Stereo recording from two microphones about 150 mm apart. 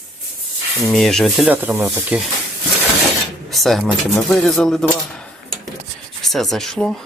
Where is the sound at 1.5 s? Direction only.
15° right (ahead or behind).